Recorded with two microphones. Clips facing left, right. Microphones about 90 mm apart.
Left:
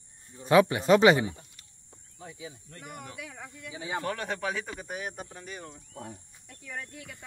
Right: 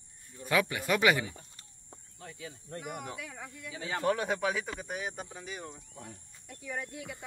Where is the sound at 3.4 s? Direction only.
15° left (ahead or behind).